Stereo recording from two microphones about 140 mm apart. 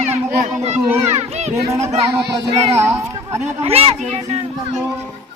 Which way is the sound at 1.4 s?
50° right (ahead or behind).